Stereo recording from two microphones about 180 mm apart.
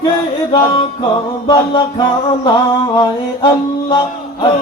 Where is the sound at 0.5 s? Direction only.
30° left (ahead or behind).